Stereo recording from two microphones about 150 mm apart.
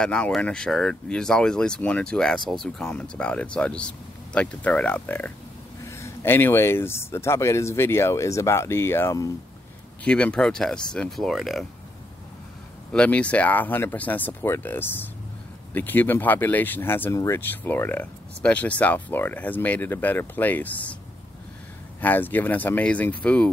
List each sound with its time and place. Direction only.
0.0 s speech: 5° left (ahead or behind)
10.0 s speech: 5° left (ahead or behind)
12.9 s speech: 10° left (ahead or behind)
22.0 s speech: 10° left (ahead or behind)